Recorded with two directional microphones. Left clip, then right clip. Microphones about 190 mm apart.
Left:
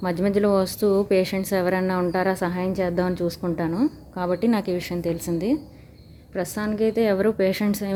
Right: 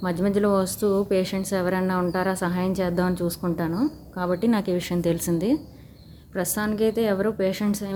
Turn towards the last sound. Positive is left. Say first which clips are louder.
# left 2 dB
turn(degrees=25)  # may be behind; listen again after turning